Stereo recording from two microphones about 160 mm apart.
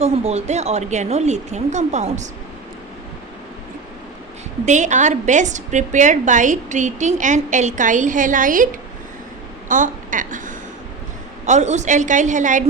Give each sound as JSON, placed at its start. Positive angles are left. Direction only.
{"t": 0.0, "sound": "a woman's voice", "side_deg": -40}
{"t": 4.6, "sound": "a woman's voice", "side_deg": -50}